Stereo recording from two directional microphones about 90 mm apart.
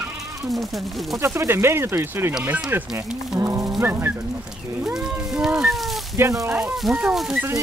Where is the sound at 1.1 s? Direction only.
30° right (ahead or behind).